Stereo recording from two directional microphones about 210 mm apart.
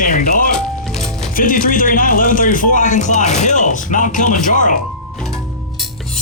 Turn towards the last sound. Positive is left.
turn(degrees=35)  # may be behind; listen again after turning